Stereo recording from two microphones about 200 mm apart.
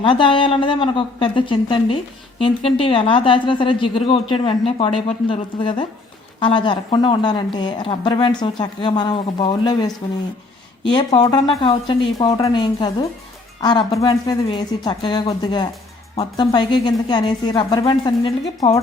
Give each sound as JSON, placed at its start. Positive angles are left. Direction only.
{"t": 0.0, "sound": "a woman's voice", "side_deg": 25}